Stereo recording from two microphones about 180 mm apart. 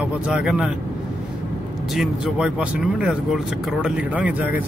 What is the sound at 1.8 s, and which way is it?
Speech, centre (ahead or behind).